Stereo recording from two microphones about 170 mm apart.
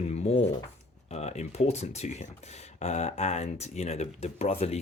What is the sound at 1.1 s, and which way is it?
Speech, 40° left (ahead or behind).